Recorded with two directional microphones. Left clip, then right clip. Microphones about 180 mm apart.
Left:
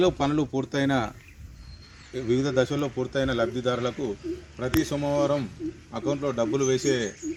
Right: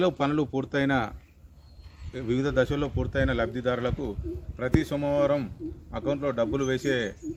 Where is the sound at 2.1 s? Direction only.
30° right (ahead or behind).